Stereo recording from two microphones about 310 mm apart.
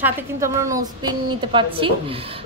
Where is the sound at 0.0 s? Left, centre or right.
Centre.